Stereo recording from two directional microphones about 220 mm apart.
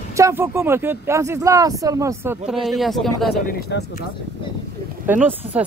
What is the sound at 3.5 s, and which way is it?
Speech, 45° left (ahead or behind).